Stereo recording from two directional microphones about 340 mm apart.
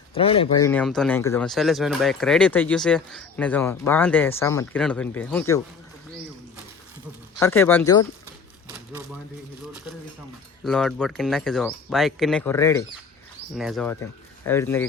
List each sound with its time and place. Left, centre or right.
0.1 s speech: centre
0.7 s speech: centre
7.3 s speech: centre
10.6 s speech: centre